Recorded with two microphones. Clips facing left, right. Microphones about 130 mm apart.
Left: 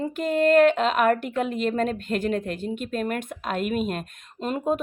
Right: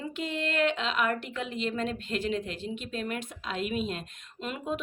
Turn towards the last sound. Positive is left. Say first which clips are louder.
# left 8 dB
turn(degrees=45)  # may be behind; listen again after turning